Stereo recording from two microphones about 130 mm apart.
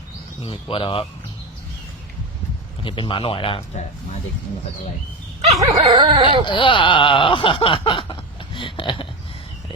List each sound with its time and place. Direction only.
0.4 s speech: 45° left (ahead or behind)
2.8 s speech: 40° left (ahead or behind)
5.5 s dog: 35° right (ahead or behind)
6.4 s speech: 40° left (ahead or behind)